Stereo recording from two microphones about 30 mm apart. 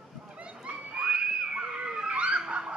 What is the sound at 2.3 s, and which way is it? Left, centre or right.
Dog, right.